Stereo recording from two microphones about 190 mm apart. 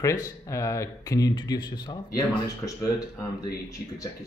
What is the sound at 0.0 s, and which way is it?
Speech, 15° left (ahead or behind).